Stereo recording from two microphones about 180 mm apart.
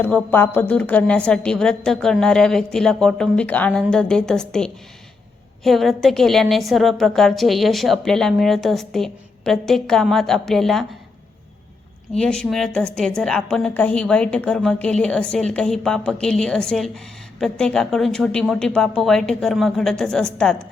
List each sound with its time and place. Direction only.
0.0 s a woman's voice: 10° left (ahead or behind)
12.1 s a woman's voice: 5° left (ahead or behind)